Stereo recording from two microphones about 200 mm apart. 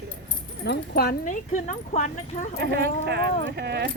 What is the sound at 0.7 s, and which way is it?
Speech, 50° left (ahead or behind).